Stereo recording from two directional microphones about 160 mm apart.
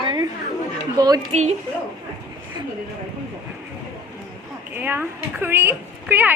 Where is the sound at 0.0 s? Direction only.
30° right (ahead or behind).